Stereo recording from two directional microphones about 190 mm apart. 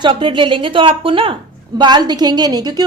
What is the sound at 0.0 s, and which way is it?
A woman's voice, 25° right (ahead or behind).